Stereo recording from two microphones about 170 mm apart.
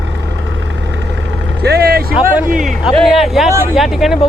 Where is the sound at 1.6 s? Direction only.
70° right (ahead or behind).